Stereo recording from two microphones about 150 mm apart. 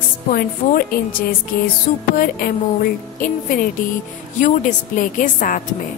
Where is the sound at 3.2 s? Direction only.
65° left (ahead or behind).